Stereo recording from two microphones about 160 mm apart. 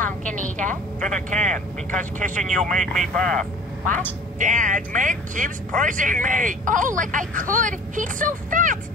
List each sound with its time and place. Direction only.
0.0 s a woman's voice: 50° right (ahead or behind)
2.5 s speech: centre (ahead or behind)
4.4 s speech: 55° right (ahead or behind)